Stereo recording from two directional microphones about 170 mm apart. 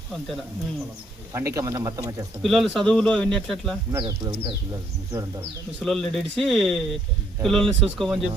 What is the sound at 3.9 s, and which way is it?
Speech, 20° right (ahead or behind).